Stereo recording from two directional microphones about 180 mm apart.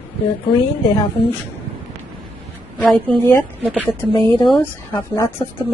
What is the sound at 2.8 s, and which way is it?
A woman's voice, 10° left (ahead or behind).